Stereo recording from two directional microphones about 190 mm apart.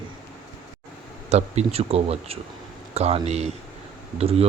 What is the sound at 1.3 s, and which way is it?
Speech, 35° right (ahead or behind).